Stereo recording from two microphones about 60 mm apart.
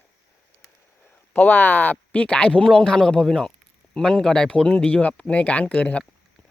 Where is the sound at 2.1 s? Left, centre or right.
Centre.